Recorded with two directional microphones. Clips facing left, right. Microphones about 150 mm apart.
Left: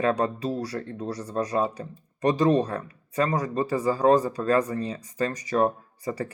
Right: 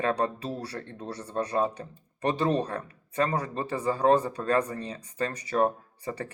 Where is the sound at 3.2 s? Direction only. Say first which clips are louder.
Left 2 dB; 30° right (ahead or behind).